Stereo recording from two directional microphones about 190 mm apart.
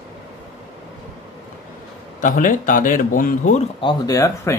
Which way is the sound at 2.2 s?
45° left (ahead or behind).